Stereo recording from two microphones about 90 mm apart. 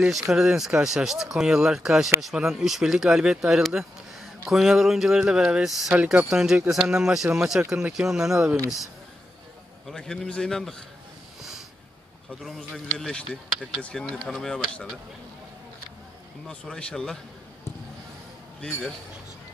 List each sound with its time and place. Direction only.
0.0 s speech: 5° right (ahead or behind)
5.9 s speech: 15° right (ahead or behind)
6.3 s speech: 5° right (ahead or behind)
9.8 s speech: 5° left (ahead or behind)
12.3 s speech: centre (ahead or behind)
16.4 s speech: 5° left (ahead or behind)
18.6 s speech: 5° left (ahead or behind)